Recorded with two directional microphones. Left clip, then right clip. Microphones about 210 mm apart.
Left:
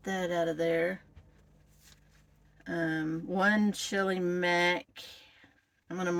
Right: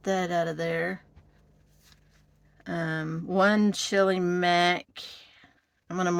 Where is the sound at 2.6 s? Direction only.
40° right (ahead or behind).